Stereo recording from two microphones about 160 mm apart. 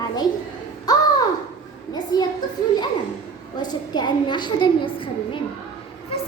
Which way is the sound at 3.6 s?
25° left (ahead or behind).